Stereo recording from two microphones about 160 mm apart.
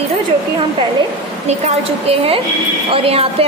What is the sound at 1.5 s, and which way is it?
A woman's voice, 40° right (ahead or behind).